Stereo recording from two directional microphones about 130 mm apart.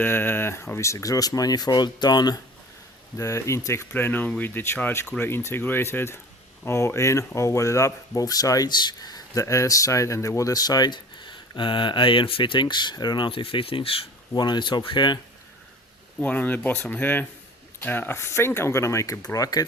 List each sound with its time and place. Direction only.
0.0 s speech: 15° left (ahead or behind); by 15.2 s 35° left (ahead or behind)
16.2 s speech: 10° left (ahead or behind); by 19.6 s 30° left (ahead or behind)